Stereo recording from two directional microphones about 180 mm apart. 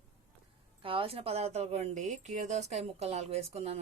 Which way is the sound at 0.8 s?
30° right (ahead or behind).